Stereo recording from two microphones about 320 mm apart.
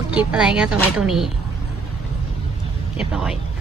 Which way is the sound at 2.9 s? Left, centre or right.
Centre.